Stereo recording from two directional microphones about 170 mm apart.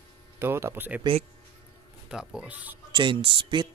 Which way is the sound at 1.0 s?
35° right (ahead or behind).